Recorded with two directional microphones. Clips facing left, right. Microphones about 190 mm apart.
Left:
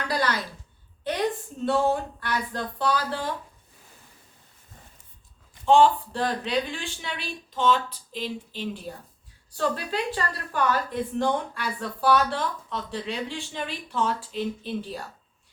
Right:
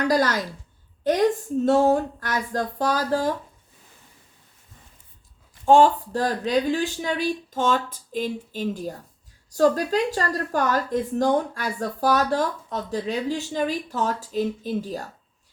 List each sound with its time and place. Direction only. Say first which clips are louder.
0.1 s speech: right 2 dB; 45° right (ahead or behind)
1.6 s speech: right 5 dB; 40° right (ahead or behind)
5.6 s a woman's voice: right 2 dB; 45° right (ahead or behind)